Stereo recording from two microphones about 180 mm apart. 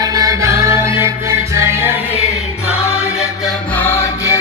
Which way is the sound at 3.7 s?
10° left (ahead or behind).